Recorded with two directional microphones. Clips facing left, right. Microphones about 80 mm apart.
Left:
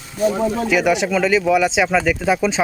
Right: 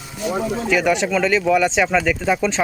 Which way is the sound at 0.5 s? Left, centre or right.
Centre.